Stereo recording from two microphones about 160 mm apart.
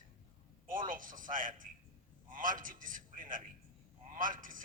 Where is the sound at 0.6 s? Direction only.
60° right (ahead or behind).